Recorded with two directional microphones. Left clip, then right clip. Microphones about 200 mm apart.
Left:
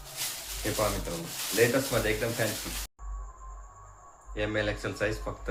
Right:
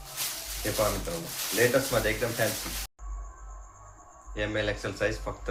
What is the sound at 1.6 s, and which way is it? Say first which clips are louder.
Speech: right 1 dB; 15° left (ahead or behind).